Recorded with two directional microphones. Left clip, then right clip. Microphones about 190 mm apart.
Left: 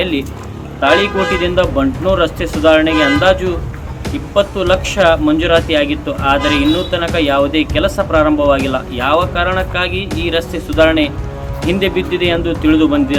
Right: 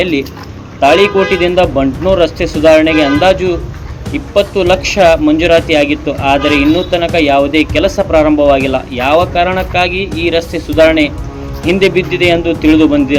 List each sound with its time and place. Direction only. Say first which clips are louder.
0.0 s speech: right 4 dB; 15° right (ahead or behind)